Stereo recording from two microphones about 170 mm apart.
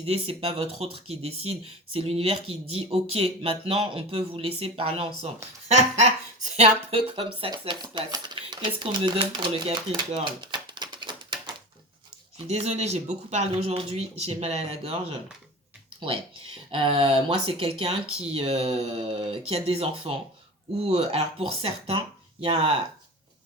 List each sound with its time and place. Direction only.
0.0 s speech: 35° right (ahead or behind)
12.5 s speech: 40° right (ahead or behind)
16.0 s speech: 30° right (ahead or behind)